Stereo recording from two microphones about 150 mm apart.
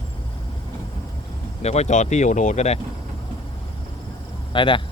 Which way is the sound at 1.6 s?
45° left (ahead or behind).